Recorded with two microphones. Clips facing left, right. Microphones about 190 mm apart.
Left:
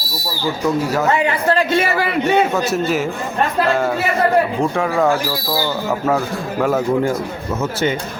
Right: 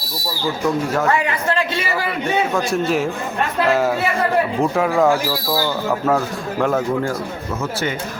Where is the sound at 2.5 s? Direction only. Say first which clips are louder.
Left 1 dB; 5° left (ahead or behind).